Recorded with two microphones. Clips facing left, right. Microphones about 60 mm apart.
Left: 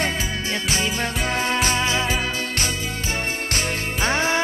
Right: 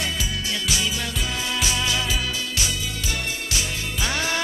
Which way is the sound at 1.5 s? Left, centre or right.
Left.